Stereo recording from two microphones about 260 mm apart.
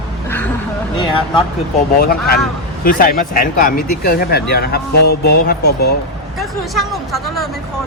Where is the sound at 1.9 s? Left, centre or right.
Left.